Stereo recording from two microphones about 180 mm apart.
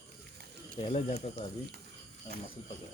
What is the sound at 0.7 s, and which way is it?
Speech, 35° left (ahead or behind).